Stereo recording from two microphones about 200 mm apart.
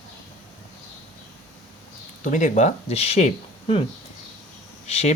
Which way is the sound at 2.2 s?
40° left (ahead or behind).